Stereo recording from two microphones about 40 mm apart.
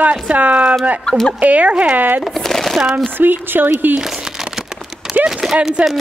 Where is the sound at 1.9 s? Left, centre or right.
Right.